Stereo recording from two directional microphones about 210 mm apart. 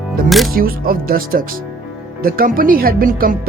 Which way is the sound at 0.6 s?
45° right (ahead or behind).